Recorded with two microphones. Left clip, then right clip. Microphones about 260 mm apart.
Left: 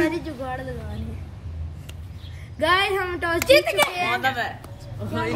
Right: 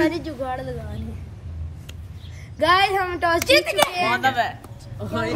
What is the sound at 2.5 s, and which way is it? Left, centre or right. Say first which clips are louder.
Speech: right 3 dB; centre.